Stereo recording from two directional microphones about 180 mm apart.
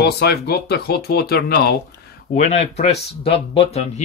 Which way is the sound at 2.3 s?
40° left (ahead or behind).